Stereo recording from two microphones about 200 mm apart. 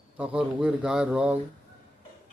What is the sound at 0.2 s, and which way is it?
A man's voice, 5° right (ahead or behind).